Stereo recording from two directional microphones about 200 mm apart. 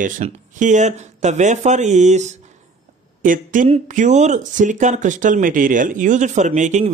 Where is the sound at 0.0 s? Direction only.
40° right (ahead or behind).